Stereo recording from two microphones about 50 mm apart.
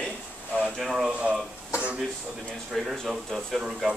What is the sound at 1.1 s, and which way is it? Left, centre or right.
Speech, right.